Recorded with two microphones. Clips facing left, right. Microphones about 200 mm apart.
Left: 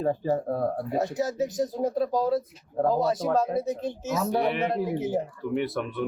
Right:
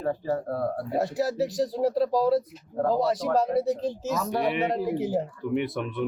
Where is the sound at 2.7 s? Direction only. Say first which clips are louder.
Even; 20° left (ahead or behind).